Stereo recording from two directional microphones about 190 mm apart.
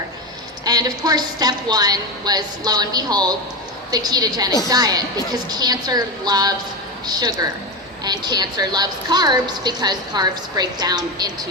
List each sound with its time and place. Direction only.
0.6 s a woman's voice: 20° right (ahead or behind)